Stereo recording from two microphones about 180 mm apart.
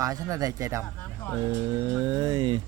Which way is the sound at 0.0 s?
20° right (ahead or behind).